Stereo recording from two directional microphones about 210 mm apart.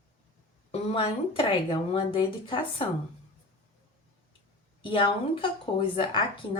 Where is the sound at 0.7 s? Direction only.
25° left (ahead or behind).